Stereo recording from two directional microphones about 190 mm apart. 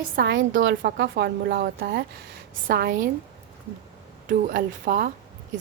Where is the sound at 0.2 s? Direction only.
70° right (ahead or behind).